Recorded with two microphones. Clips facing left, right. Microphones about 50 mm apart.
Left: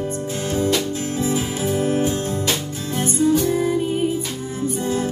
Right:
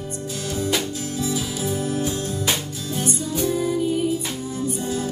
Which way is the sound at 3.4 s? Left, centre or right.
Left.